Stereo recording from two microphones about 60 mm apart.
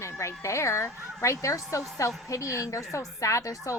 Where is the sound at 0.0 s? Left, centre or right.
Left.